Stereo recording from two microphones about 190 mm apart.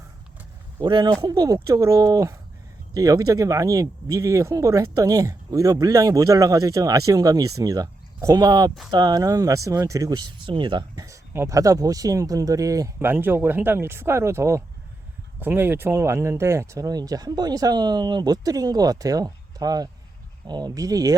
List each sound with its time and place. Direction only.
0.8 s speech: 25° right (ahead or behind)